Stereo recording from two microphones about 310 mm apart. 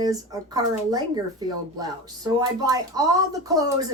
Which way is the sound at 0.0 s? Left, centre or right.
Centre.